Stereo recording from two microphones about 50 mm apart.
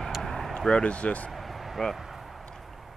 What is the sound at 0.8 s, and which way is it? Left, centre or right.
Speech, left.